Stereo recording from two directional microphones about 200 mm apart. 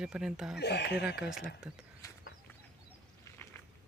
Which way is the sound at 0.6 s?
55° left (ahead or behind).